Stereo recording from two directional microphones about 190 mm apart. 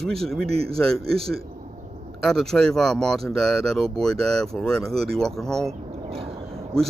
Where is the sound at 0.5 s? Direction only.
30° right (ahead or behind).